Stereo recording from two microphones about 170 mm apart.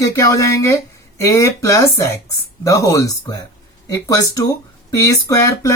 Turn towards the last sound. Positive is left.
turn(degrees=20)  # may be behind; listen again after turning